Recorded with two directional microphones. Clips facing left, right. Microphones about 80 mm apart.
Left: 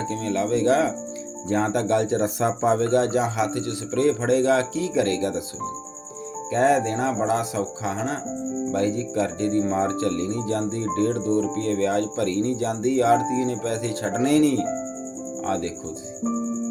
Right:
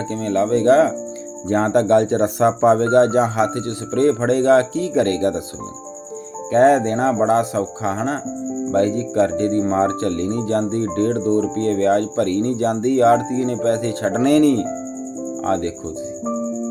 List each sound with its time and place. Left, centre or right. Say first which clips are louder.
0.1 s speech: right 7 dB; right
6.5 s speech: right 6 dB; right